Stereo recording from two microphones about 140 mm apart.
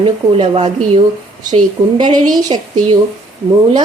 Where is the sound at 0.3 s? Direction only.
45° right (ahead or behind).